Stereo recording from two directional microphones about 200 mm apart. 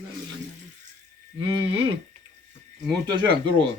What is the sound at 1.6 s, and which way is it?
Speech, 25° right (ahead or behind).